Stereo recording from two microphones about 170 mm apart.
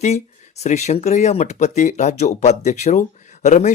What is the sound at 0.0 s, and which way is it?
Speech, 40° left (ahead or behind).